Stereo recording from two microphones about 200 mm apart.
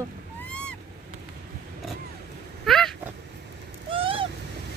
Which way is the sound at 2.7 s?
Centre (ahead or behind).